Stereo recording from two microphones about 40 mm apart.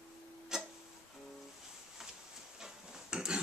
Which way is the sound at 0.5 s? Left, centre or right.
Centre.